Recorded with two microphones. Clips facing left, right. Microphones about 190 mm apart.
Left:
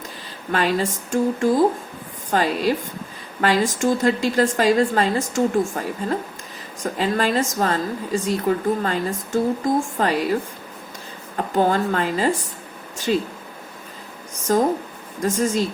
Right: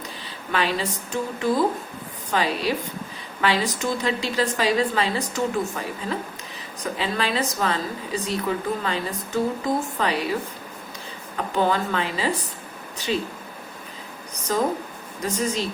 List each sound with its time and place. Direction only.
0.5 s a woman's voice: 45° left (ahead or behind)
11.3 s a woman's voice: 45° left (ahead or behind)
15.2 s a woman's voice: 50° left (ahead or behind)